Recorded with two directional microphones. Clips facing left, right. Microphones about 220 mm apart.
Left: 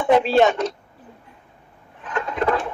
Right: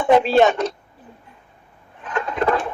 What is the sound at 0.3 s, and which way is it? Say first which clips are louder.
Speech: right 1 dB; 55° right (ahead or behind).